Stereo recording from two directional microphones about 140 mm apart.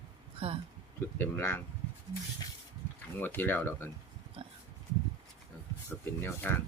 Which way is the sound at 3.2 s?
15° left (ahead or behind).